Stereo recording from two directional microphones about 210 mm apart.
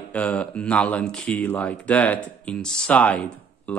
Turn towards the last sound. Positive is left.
turn(degrees=10)  # may be behind; listen again after turning